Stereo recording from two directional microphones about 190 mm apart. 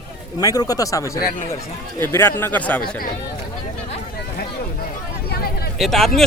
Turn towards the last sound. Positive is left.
turn(degrees=0)  # may be behind; listen again after turning